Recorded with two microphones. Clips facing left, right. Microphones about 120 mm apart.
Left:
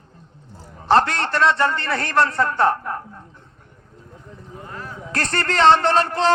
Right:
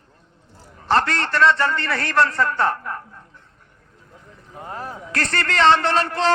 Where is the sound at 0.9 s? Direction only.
20° left (ahead or behind).